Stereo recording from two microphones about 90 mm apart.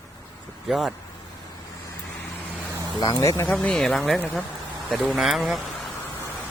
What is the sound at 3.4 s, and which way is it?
Speech, 10° left (ahead or behind).